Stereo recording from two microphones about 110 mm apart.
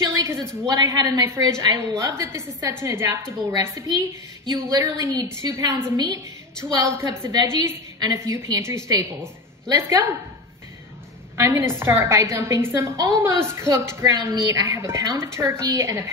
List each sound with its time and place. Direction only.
0.0 s a sound: 35° right (ahead or behind)
0.7 s a woman's voice: 35° right (ahead or behind)
11.3 s a woman's voice: 25° right (ahead or behind)